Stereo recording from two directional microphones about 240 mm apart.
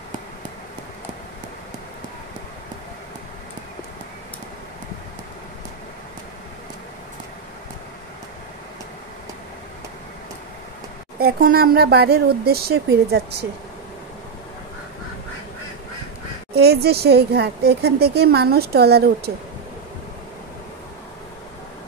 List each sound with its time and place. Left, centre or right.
11.1 s speech: right
16.5 s speech: right